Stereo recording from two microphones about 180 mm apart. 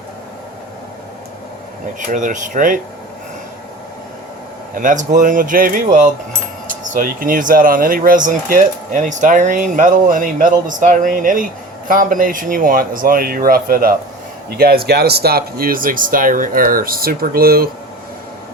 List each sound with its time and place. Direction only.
2.0 s speech: 45° right (ahead or behind)
4.7 s speech: 50° right (ahead or behind)